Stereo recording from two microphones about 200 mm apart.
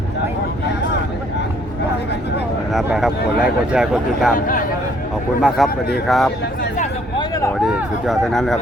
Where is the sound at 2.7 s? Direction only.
Centre (ahead or behind).